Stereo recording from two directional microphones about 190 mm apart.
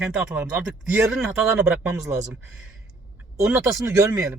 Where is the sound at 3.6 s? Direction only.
15° right (ahead or behind).